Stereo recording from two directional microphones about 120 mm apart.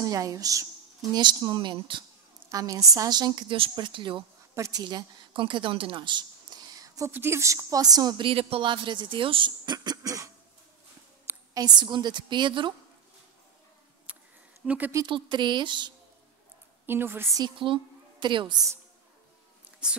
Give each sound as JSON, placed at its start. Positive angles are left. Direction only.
{"t": 0.0, "sound": "a woman's voice", "side_deg": -30}
{"t": 2.5, "sound": "a woman's voice", "side_deg": -30}
{"t": 4.6, "sound": "a woman's voice", "side_deg": -30}
{"t": 7.1, "sound": "a woman's voice", "side_deg": -20}
{"t": 8.3, "sound": "speech", "side_deg": -50}
{"t": 11.5, "sound": "a woman's voice", "side_deg": -35}
{"t": 14.1, "sound": "a sound", "side_deg": -10}
{"t": 14.6, "sound": "speech", "side_deg": -10}
{"t": 15.0, "sound": "a woman's voice", "side_deg": -40}
{"t": 16.8, "sound": "a woman's voice", "side_deg": -20}
{"t": 17.4, "sound": "a woman's voice", "side_deg": -45}